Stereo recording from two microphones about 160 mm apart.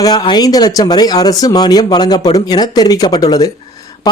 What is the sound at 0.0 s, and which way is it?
Speech, 25° left (ahead or behind).